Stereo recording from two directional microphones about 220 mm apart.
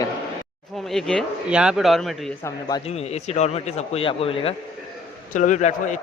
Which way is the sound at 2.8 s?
30° left (ahead or behind).